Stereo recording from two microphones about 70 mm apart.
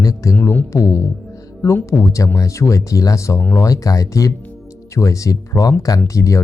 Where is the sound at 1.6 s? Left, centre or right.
Left.